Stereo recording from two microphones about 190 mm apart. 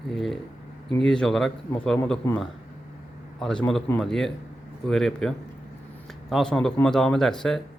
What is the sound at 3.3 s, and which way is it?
Speech, 5° left (ahead or behind).